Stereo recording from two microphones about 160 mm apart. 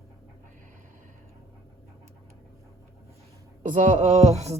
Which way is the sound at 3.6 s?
55° right (ahead or behind).